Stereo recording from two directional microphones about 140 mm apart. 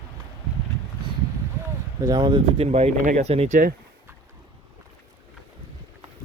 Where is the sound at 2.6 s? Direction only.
50° right (ahead or behind).